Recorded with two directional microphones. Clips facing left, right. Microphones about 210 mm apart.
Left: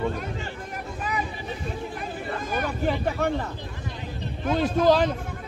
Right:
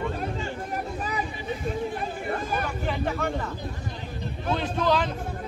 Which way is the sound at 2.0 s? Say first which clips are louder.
Right 2 dB; 35° right (ahead or behind).